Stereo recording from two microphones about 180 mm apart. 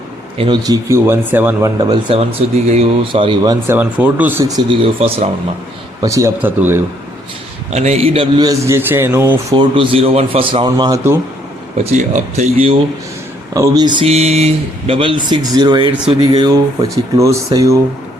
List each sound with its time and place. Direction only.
0.3 s speech: 25° right (ahead or behind); by 1.7 s 10° right (ahead or behind)
1.8 s speech: 25° right (ahead or behind)
3.8 s speech: 10° right (ahead or behind); by 5.3 s 30° right (ahead or behind)
6.0 s speech: 15° right (ahead or behind)
7.7 s speech: 40° right (ahead or behind); by 9.6 s 15° right (ahead or behind)
9.6 s speech: 30° right (ahead or behind)
11.9 s speech: 40° right (ahead or behind)
13.5 s speech: 20° right (ahead or behind)